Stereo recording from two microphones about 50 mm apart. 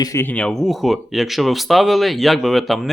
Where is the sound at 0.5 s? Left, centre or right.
Centre.